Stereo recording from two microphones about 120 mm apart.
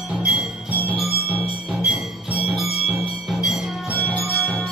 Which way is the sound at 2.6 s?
60° left (ahead or behind).